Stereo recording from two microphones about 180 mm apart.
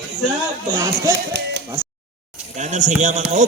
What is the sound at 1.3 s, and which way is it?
Speech, 65° right (ahead or behind).